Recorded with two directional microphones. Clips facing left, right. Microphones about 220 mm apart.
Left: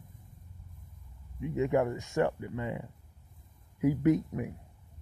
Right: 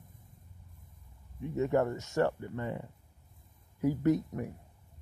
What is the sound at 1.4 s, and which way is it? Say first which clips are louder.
Speech: left 1 dB; 15° left (ahead or behind).